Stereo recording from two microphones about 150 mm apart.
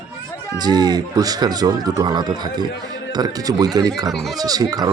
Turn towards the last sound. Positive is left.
turn(degrees=-25)  # may be behind; listen again after turning